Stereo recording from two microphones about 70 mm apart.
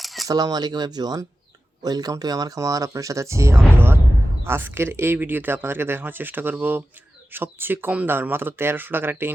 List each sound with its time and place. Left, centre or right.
0.0 s a sound: centre
0.3 s speech: right
3.8 s speech: right